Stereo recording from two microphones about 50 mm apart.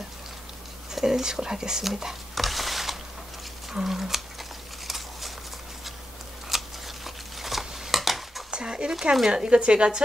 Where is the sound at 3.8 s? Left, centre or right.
Centre.